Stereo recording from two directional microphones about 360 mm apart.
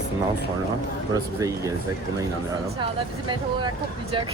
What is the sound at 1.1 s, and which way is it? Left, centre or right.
Speech, centre.